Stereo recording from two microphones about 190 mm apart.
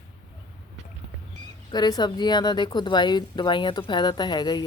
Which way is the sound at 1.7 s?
20° left (ahead or behind).